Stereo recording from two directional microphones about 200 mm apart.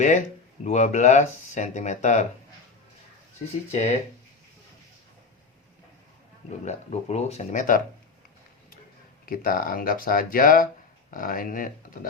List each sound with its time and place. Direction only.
0.6 s speech: 35° left (ahead or behind)
3.7 s speech: 35° left (ahead or behind)
6.7 s speech: 35° left (ahead or behind)
9.2 s speech: 45° left (ahead or behind)